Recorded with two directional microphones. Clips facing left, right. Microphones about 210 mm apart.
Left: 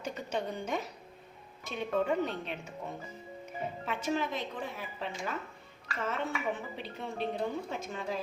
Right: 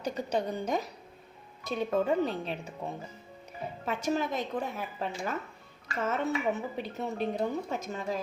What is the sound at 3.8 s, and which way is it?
Speech, 40° right (ahead or behind).